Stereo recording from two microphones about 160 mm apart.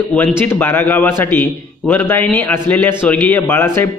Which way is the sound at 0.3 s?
15° left (ahead or behind).